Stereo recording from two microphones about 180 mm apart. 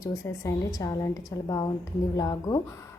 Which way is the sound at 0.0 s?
15° left (ahead or behind).